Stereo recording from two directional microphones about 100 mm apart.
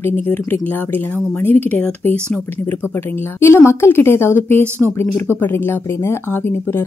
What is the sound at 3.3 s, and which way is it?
Speech, 25° left (ahead or behind).